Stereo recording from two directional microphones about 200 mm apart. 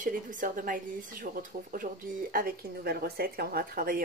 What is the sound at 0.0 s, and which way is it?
A woman's voice, 40° right (ahead or behind).